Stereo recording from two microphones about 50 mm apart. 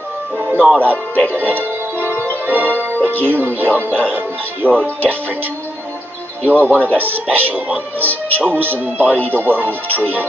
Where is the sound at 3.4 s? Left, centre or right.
Right.